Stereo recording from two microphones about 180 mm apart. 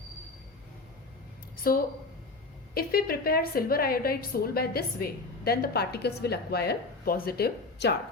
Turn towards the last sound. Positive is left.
turn(degrees=65)  # may be behind; listen again after turning